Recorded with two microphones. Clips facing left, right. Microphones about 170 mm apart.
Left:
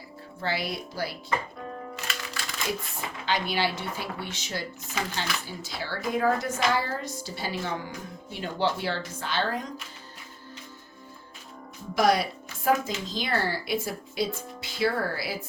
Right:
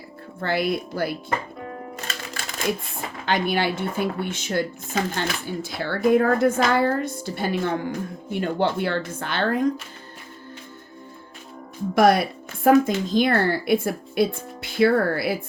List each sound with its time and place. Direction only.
0.4 s speech: 55° right (ahead or behind)
2.0 s music: 45° right (ahead or behind)
3.2 s speech: 50° right (ahead or behind)
11.9 s speech: 55° right (ahead or behind)